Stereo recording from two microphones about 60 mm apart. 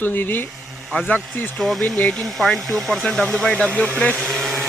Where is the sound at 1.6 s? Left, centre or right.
Centre.